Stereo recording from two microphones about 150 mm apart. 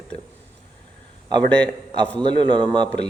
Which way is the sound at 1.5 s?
10° left (ahead or behind).